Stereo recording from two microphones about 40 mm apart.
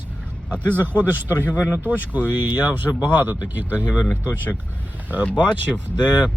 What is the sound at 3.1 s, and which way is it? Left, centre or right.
Speech, right.